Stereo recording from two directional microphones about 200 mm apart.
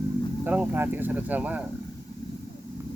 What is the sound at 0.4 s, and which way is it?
Speech, 10° right (ahead or behind).